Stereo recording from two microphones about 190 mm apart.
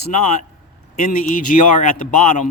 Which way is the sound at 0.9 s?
40° left (ahead or behind).